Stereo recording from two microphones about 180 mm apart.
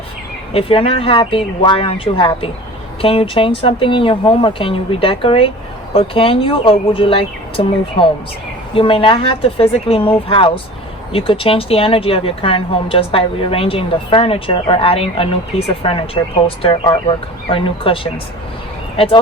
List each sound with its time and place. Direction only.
0.5 s speech: 30° left (ahead or behind)